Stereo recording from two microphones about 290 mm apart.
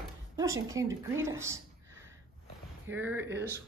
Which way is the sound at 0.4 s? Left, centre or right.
Centre.